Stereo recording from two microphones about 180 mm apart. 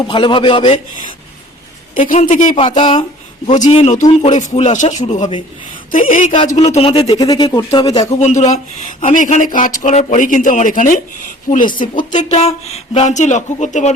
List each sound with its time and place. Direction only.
0.0 s speech: 25° left (ahead or behind)
2.0 s speech: 45° left (ahead or behind)
2.5 s speech: 30° left (ahead or behind)
3.5 s speech: 40° left (ahead or behind)
6.6 s speech: 35° left (ahead or behind)
7.1 s speech: 20° left (ahead or behind)
8.2 s speech: 40° left (ahead or behind)